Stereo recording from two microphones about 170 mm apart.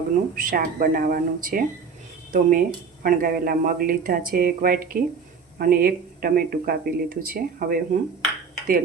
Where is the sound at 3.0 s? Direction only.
55° right (ahead or behind).